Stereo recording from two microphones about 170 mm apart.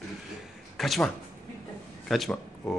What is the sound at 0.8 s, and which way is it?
A man's voice, centre (ahead or behind).